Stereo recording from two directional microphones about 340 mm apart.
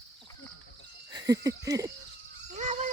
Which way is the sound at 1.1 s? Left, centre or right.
Centre.